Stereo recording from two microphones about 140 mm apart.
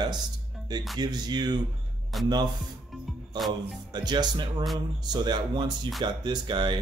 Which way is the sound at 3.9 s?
30° right (ahead or behind).